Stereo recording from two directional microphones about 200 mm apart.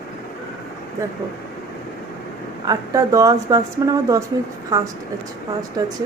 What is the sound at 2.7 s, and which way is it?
A woman's voice, 15° right (ahead or behind).